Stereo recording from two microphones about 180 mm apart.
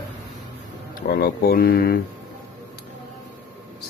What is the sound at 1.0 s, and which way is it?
Speech, 60° left (ahead or behind).